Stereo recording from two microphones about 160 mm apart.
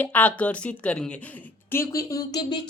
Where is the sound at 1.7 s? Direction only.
15° left (ahead or behind).